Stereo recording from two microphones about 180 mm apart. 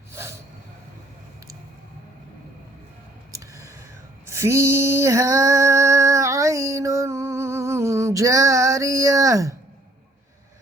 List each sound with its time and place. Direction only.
0.1 s snort: 15° right (ahead or behind)
3.3 s a sound: 15° right (ahead or behind)
4.3 s female singing: 15° right (ahead or behind)